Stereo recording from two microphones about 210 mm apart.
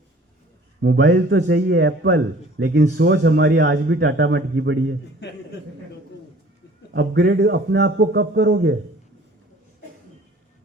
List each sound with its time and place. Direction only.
0.8 s a man's voice: 55° right (ahead or behind)
6.9 s a man's voice: 55° right (ahead or behind)